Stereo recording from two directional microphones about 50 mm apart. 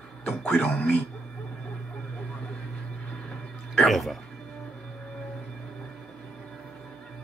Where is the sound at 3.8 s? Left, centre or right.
Centre.